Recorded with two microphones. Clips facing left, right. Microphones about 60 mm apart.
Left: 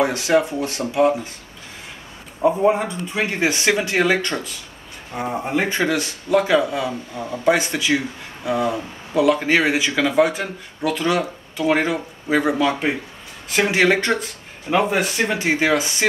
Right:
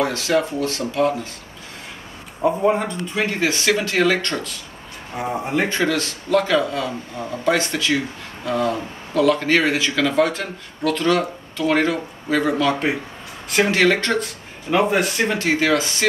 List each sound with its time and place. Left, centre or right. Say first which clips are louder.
0.0 s speech: left 2 dB; centre
2.4 s a man's voice: left 1 dB; centre
3.3 s speech: left 1 dB; left
5.1 s speech: even; centre
14.7 s a man's voice: right 1 dB; centre
15.3 s speech: even; centre